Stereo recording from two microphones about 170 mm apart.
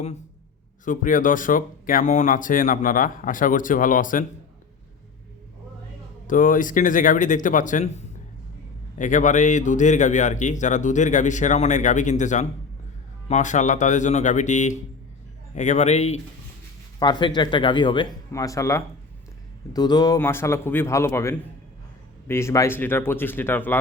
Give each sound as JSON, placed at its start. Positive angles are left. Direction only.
{"t": 0.9, "sound": "speech", "side_deg": 50}
{"t": 6.2, "sound": "a man's voice", "side_deg": 50}
{"t": 17.0, "sound": "speech", "side_deg": 25}
{"t": 18.3, "sound": "speech", "side_deg": 20}